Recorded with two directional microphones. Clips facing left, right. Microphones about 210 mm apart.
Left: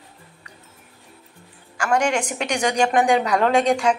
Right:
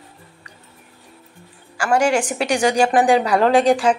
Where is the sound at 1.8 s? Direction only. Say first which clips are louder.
Right 3 dB; 5° right (ahead or behind).